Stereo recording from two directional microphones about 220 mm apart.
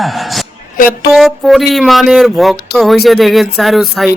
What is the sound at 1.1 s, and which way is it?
Speech, centre (ahead or behind).